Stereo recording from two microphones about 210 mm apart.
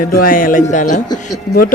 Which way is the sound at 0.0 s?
40° left (ahead or behind).